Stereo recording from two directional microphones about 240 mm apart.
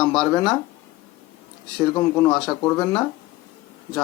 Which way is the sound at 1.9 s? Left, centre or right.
Centre.